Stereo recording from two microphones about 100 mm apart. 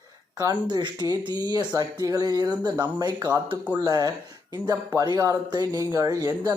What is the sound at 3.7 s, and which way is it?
Speech, 40° right (ahead or behind).